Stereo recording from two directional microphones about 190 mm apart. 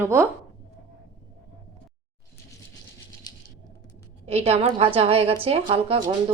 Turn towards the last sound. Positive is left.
turn(degrees=-30)  # may be behind; listen again after turning